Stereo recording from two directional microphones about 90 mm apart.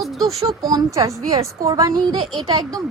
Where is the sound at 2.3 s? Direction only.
55° right (ahead or behind).